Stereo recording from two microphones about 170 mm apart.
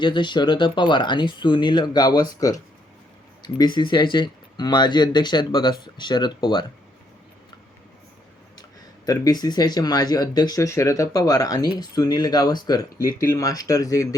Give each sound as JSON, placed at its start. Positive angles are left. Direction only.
{"t": 0.0, "sound": "speech", "side_deg": 25}
{"t": 3.4, "sound": "speech", "side_deg": 25}
{"t": 9.0, "sound": "speech", "side_deg": 20}